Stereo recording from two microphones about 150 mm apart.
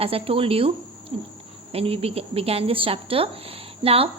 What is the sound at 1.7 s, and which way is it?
A woman's voice, 40° right (ahead or behind).